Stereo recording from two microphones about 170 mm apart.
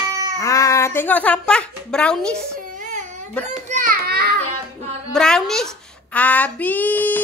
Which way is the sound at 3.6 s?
60° right (ahead or behind).